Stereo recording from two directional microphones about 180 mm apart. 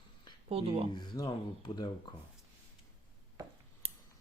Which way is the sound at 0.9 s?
20° left (ahead or behind).